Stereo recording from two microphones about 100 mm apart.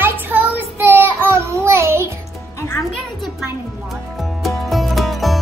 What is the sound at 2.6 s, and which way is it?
Speech, 30° left (ahead or behind).